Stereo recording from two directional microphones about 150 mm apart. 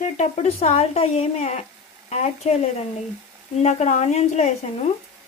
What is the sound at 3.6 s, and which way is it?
A woman's voice, 50° left (ahead or behind).